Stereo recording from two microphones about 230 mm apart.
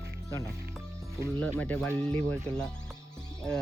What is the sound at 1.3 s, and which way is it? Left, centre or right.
Speech, centre.